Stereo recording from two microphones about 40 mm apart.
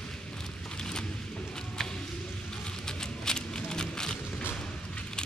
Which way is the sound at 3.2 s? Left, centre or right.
Centre.